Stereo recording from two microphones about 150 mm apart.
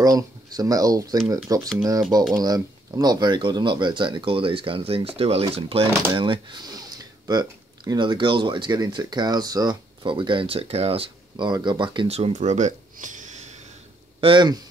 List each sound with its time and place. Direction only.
0.0 s speech: 25° right (ahead or behind); by 13.6 s 50° right (ahead or behind)
14.2 s speech: 30° right (ahead or behind)